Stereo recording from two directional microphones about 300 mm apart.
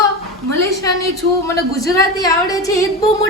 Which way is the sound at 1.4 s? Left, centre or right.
Centre.